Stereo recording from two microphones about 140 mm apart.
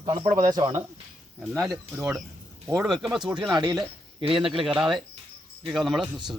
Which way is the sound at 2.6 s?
5° right (ahead or behind).